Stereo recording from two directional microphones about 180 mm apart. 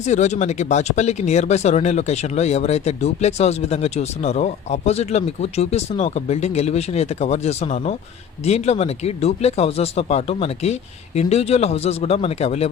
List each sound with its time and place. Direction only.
0.0 s speech: 40° left (ahead or behind)